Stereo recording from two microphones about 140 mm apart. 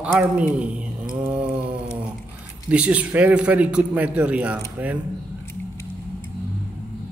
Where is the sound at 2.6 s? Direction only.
10° right (ahead or behind).